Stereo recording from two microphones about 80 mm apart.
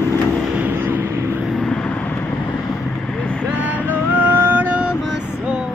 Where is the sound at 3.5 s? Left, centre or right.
Right.